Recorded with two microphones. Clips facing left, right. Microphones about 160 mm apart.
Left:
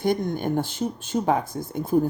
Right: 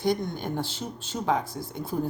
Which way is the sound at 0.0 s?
50° left (ahead or behind).